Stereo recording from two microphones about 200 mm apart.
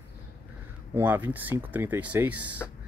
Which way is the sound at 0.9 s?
10° right (ahead or behind).